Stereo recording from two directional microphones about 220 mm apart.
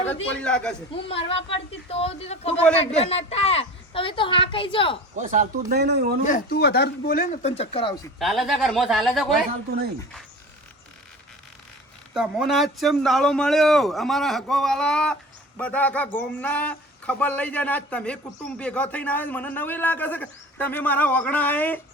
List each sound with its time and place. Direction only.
0.4 s a man's voice: 5° left (ahead or behind)
0.9 s a woman's voice: 25° left (ahead or behind)
5.1 s speech: 35° right (ahead or behind)
6.2 s speech: 45° left (ahead or behind); by 7.9 s 25° left (ahead or behind)
8.2 s a man's voice: centre (ahead or behind)
12.1 s a man's voice: centre (ahead or behind)